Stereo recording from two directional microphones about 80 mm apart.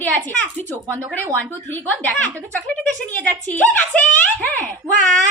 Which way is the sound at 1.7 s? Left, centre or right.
Left.